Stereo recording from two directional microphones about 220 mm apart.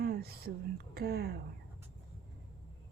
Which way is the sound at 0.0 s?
45° right (ahead or behind).